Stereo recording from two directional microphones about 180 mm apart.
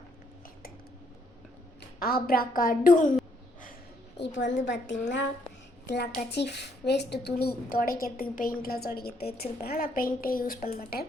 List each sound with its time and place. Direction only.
2.0 s a woman's voice: 55° left (ahead or behind)
4.2 s a woman's voice: 85° left
5.8 s a woman's voice: 65° left (ahead or behind)